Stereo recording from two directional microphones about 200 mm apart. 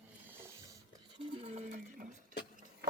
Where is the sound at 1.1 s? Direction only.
30° right (ahead or behind).